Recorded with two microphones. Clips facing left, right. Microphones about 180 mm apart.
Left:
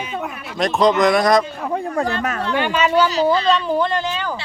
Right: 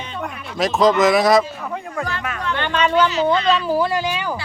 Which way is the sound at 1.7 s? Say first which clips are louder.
Left 5 dB; 30° left (ahead or behind).